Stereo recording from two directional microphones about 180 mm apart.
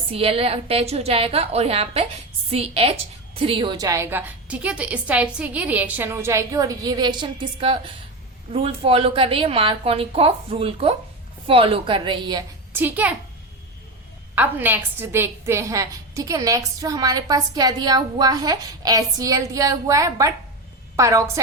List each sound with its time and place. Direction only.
0.1 s a woman's voice: 30° right (ahead or behind)
12.7 s a woman's voice: 10° right (ahead or behind)
14.3 s a woman's voice: 10° right (ahead or behind)